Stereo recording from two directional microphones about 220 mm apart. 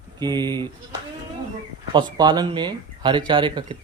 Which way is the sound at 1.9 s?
20° right (ahead or behind).